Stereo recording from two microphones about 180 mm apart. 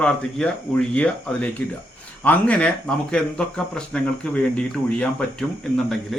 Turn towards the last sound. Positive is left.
turn(degrees=0)  # may be behind; listen again after turning